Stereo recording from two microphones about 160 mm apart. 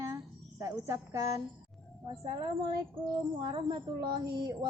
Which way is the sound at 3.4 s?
30° right (ahead or behind).